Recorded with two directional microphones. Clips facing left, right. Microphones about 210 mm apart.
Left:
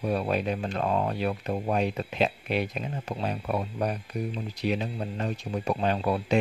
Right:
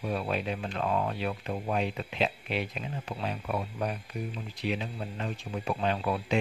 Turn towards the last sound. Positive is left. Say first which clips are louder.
# left 3 dB
turn(degrees=40)  # may be behind; listen again after turning